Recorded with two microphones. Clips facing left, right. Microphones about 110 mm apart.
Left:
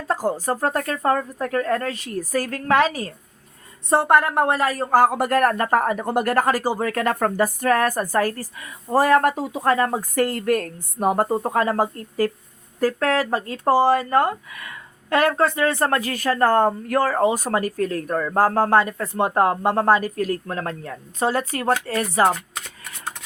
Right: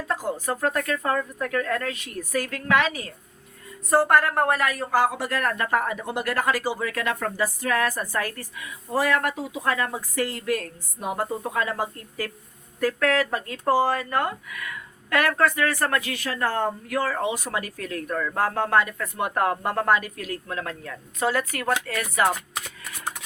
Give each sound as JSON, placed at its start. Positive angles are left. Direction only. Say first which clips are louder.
{"t": 0.1, "sound": "speech", "louder": "left 6 dB", "side_deg": 35}
{"t": 3.8, "sound": "speech", "louder": "left 2 dB", "side_deg": 25}
{"t": 16.0, "sound": "speech", "louder": "left 7 dB", "side_deg": 40}